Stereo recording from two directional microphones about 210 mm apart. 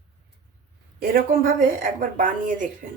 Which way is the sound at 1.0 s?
45° right (ahead or behind).